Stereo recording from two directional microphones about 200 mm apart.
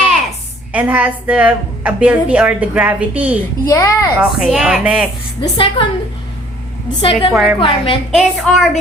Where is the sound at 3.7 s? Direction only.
15° left (ahead or behind).